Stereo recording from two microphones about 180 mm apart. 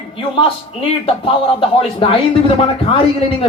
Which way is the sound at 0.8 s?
30° left (ahead or behind).